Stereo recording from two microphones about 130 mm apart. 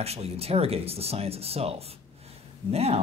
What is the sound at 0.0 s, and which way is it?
Speech, 50° right (ahead or behind).